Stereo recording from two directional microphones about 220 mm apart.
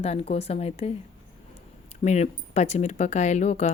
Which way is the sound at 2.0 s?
30° left (ahead or behind).